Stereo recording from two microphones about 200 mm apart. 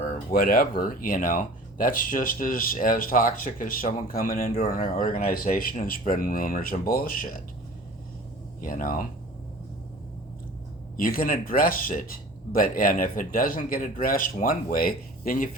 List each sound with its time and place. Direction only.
0.3 s speech: 50° left (ahead or behind)
8.6 s speech: 45° left (ahead or behind)
10.9 s speech: 45° left (ahead or behind)